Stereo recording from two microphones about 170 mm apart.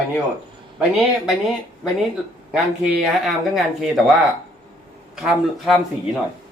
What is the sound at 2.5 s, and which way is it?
Speech, centre (ahead or behind).